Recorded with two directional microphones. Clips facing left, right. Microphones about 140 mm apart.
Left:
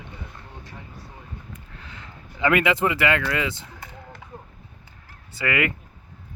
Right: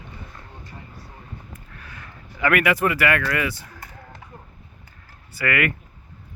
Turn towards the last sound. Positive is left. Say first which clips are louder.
# right 1 dB
turn(degrees=20)  # may be behind; listen again after turning